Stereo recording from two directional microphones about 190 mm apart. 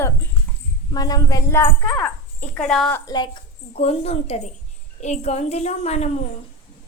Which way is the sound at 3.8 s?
30° left (ahead or behind).